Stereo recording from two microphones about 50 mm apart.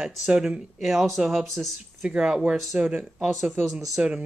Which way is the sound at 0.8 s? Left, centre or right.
Centre.